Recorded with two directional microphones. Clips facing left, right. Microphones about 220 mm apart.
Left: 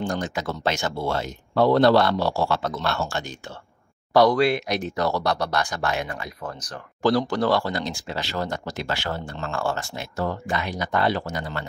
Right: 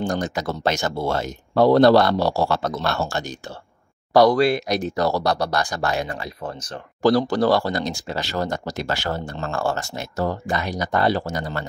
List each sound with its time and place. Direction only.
0.0 s speech: 40° right (ahead or behind)